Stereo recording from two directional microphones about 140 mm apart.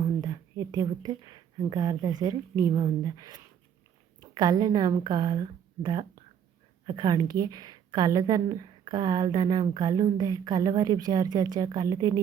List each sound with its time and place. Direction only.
0.0 s a woman's voice: 25° right (ahead or behind)